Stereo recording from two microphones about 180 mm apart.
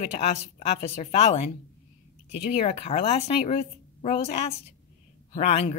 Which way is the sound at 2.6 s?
35° left (ahead or behind).